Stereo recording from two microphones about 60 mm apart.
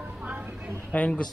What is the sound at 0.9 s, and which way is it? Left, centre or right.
Speech, left.